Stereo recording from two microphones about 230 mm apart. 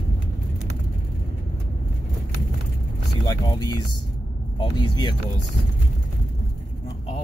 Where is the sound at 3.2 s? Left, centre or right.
Centre.